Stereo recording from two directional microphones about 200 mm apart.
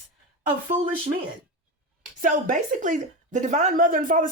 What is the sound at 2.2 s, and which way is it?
A woman's voice, 40° right (ahead or behind).